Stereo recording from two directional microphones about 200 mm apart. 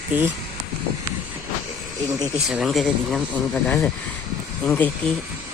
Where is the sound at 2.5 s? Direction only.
Centre (ahead or behind).